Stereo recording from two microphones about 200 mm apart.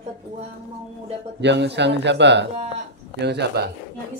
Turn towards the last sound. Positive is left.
turn(degrees=-55)  # may be behind; listen again after turning